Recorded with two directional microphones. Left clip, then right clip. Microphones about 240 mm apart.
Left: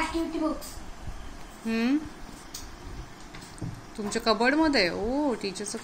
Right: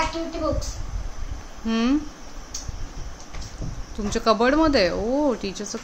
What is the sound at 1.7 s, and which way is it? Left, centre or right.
Speech, centre.